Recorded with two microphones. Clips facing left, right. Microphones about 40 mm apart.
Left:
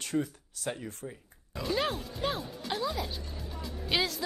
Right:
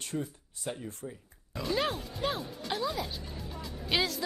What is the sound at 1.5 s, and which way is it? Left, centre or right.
A woman's voice, centre.